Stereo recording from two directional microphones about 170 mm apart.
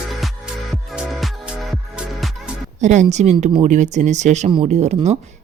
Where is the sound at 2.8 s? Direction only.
45° right (ahead or behind).